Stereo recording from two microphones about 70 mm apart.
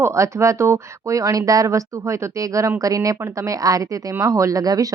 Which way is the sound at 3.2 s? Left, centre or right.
Right.